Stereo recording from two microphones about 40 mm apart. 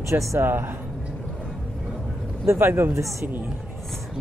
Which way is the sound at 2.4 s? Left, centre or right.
Right.